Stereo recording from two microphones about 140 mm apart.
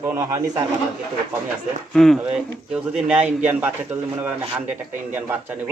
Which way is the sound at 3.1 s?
10° right (ahead or behind).